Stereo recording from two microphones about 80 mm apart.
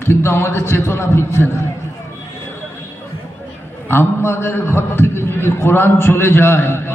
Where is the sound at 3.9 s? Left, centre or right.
Left.